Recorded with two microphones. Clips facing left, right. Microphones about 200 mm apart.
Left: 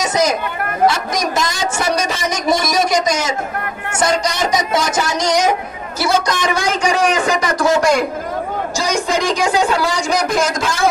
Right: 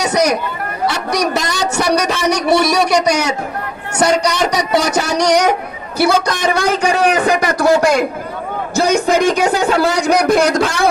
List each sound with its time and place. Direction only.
0.0 s a sound: 65° right (ahead or behind)
4.0 s music: 65° right (ahead or behind)
5.9 s a man's voice: 60° right (ahead or behind)